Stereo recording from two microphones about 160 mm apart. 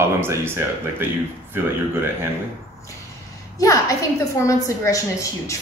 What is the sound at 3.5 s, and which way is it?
A woman's voice, 20° left (ahead or behind).